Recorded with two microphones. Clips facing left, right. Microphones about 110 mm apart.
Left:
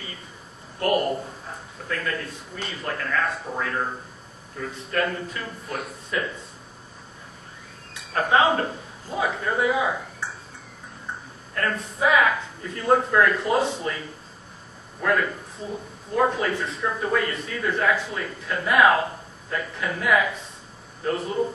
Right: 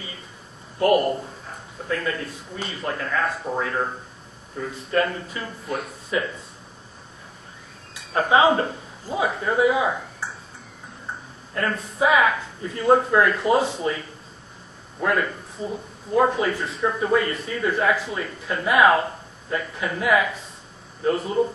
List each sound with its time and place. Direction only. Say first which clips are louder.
1.9 s a man's voice: right 3 dB; 15° right (ahead or behind)
2.6 s speech: right 3 dB; centre (ahead or behind)
2.9 s a man's voice: right 1 dB; 10° right (ahead or behind)
4.9 s speech: right 3 dB; centre (ahead or behind)
7.9 s speech: right 2 dB; centre (ahead or behind)
11.5 s speech: right 1 dB; 5° right (ahead or behind)
15.0 s a man's voice: even; centre (ahead or behind)